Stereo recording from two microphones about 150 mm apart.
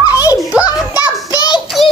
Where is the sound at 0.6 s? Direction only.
25° left (ahead or behind).